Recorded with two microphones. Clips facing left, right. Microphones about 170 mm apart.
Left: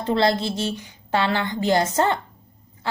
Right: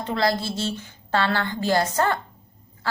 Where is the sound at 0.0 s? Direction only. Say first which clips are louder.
Left 3 dB; 30° left (ahead or behind).